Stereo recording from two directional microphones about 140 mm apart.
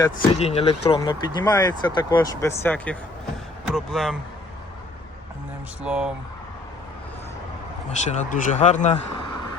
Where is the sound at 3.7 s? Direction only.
Centre (ahead or behind).